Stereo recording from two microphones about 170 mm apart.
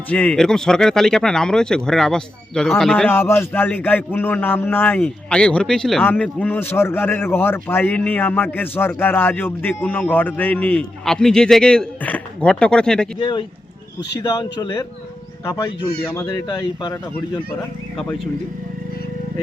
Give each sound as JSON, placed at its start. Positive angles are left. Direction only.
{"t": 0.1, "sound": "speech", "side_deg": 5}
{"t": 3.1, "sound": "a man's voice", "side_deg": 10}
{"t": 13.1, "sound": "speech", "side_deg": 30}